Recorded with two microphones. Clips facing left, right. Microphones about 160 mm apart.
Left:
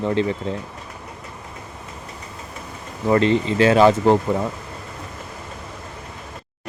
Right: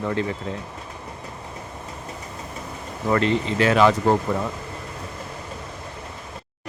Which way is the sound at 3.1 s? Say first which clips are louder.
Left 4 dB; 30° left (ahead or behind).